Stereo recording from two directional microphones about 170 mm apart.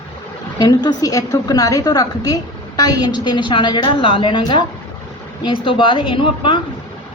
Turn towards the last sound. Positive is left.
turn(degrees=30)  # may be behind; listen again after turning